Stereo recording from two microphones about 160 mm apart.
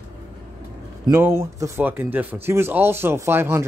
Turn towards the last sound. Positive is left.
turn(degrees=-15)  # may be behind; listen again after turning